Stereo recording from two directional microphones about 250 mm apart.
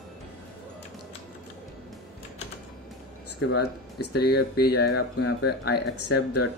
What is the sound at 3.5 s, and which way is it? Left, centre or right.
Speech, left.